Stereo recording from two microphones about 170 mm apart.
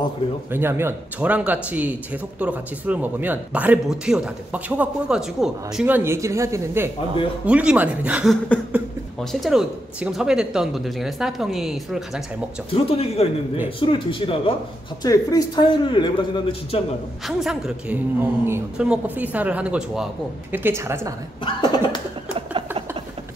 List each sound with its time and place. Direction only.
0.5 s speech: 15° right (ahead or behind)
8.7 s a sound: 10° right (ahead or behind)
9.2 s speech: centre (ahead or behind)
12.7 s a man's voice: 35° left (ahead or behind)
17.3 s speech: centre (ahead or behind)
21.5 s a sound: 25° left (ahead or behind)